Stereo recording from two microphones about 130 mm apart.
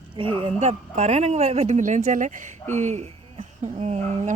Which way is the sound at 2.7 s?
65° right (ahead or behind).